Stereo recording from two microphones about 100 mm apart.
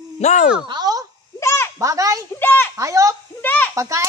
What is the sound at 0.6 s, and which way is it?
Speech, 40° right (ahead or behind).